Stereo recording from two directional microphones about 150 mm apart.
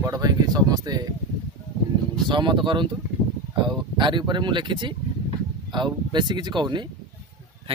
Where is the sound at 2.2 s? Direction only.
30° right (ahead or behind).